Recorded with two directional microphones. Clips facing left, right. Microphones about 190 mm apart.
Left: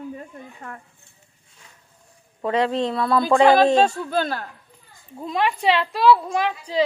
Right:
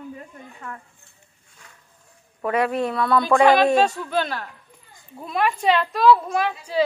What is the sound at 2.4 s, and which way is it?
A woman's voice, 25° left (ahead or behind).